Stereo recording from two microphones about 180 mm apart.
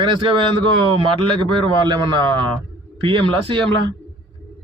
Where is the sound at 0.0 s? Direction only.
25° right (ahead or behind).